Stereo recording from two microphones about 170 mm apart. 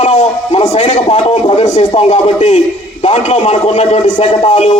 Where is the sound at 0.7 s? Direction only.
40° left (ahead or behind).